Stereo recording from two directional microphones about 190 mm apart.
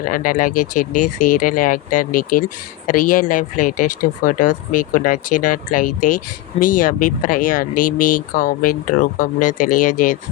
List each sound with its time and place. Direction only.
0.0 s speech: 45° left (ahead or behind)